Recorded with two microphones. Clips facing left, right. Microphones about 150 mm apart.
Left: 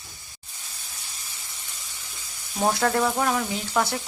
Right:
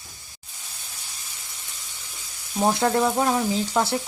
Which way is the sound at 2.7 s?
20° right (ahead or behind).